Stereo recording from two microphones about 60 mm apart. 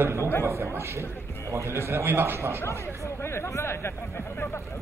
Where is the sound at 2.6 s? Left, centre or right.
Left.